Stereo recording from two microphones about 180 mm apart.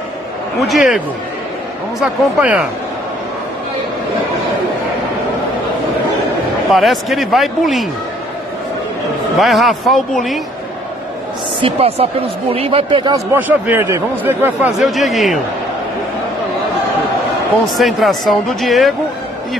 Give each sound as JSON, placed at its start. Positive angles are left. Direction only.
{"t": 0.6, "sound": "a man's voice", "side_deg": 0}
{"t": 6.7, "sound": "a man's voice", "side_deg": 0}
{"t": 9.4, "sound": "a man's voice", "side_deg": 0}
{"t": 11.6, "sound": "speech", "side_deg": -35}
{"t": 13.1, "sound": "speech", "side_deg": -10}
{"t": 17.7, "sound": "a man's voice", "side_deg": 0}